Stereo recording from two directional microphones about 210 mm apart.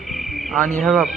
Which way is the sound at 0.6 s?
35° right (ahead or behind).